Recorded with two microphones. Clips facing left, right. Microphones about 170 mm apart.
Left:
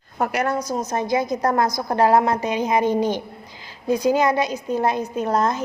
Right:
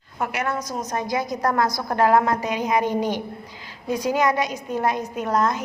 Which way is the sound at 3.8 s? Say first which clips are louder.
Left 3 dB; 30° left (ahead or behind).